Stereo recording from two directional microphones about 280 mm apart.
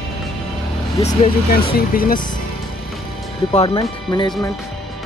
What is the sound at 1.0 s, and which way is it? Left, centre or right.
Speech, left.